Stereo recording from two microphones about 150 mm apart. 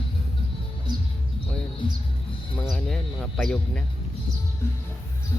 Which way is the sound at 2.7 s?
Centre (ahead or behind).